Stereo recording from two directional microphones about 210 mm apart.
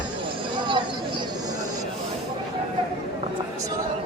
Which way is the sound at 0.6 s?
20° right (ahead or behind).